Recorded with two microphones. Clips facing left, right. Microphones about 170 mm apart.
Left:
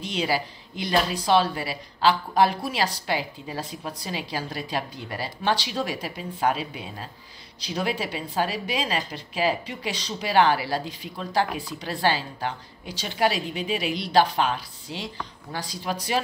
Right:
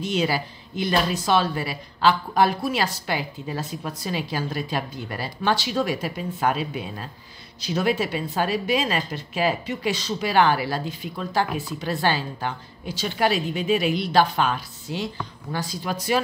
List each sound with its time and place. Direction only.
0.0 s a woman's voice: 30° left (ahead or behind)
7.6 s a woman's voice: 30° left (ahead or behind)